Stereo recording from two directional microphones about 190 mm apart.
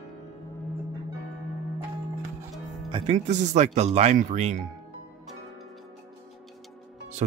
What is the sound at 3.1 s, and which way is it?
Speech, 40° right (ahead or behind).